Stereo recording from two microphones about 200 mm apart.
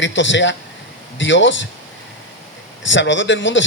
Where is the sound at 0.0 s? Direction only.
65° left (ahead or behind).